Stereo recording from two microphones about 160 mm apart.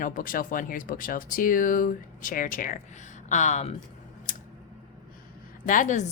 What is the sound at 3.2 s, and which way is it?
Speech, 50° left (ahead or behind).